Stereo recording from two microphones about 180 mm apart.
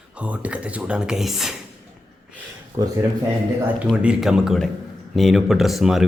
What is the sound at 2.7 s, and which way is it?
Speech, 15° right (ahead or behind).